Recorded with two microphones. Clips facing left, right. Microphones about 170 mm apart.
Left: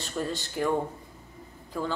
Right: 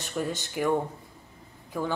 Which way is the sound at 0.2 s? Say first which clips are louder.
Right 1 dB; 10° right (ahead or behind).